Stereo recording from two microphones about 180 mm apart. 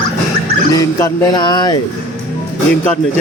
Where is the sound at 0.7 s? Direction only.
20° left (ahead or behind).